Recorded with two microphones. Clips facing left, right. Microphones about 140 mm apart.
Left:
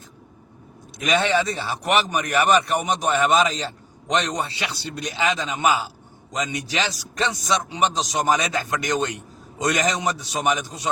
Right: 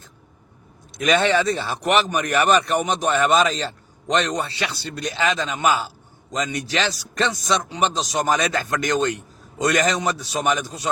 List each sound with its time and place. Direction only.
1.0 s speech: 5° left (ahead or behind)